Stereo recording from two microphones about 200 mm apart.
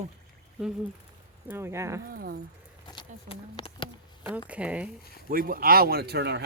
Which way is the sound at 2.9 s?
25° left (ahead or behind).